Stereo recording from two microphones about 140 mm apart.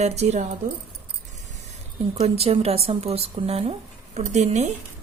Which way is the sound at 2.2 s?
45° right (ahead or behind).